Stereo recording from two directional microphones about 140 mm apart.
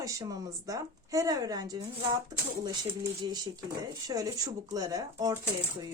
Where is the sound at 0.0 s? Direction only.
25° right (ahead or behind).